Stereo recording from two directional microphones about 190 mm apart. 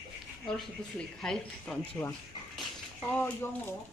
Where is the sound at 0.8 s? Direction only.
5° left (ahead or behind).